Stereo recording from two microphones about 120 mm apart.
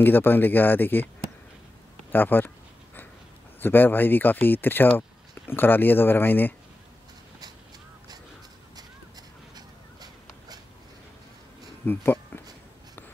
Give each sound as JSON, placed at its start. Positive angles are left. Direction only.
{"t": 0.0, "sound": "speech", "side_deg": 15}
{"t": 2.1, "sound": "speech", "side_deg": 15}
{"t": 3.6, "sound": "speech", "side_deg": 15}
{"t": 9.6, "sound": "a sound", "side_deg": -35}
{"t": 11.8, "sound": "speech", "side_deg": 15}